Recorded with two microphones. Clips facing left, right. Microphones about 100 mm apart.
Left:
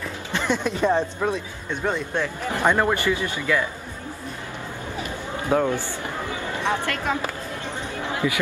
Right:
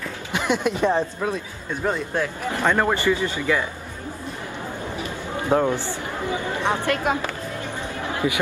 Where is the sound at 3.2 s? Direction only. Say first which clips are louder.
Right 1 dB; 20° right (ahead or behind).